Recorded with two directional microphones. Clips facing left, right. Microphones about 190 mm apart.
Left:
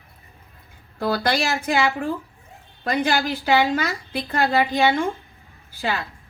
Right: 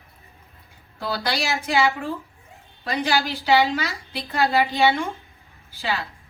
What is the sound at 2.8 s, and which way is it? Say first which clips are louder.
Speech: left 2 dB; 55° left (ahead or behind).